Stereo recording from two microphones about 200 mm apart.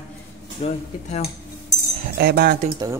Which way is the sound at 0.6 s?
35° left (ahead or behind).